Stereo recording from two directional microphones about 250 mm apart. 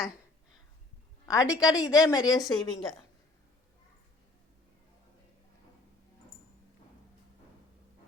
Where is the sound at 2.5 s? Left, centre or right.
Centre.